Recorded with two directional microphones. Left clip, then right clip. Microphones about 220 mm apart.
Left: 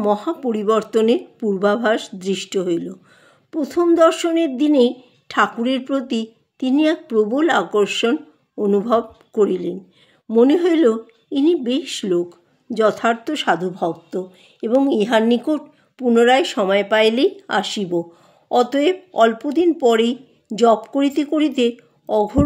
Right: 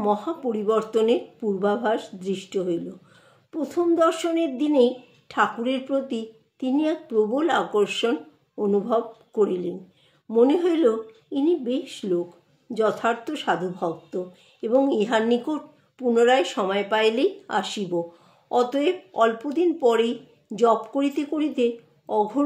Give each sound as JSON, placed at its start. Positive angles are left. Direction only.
{"t": 0.0, "sound": "speech", "side_deg": 45}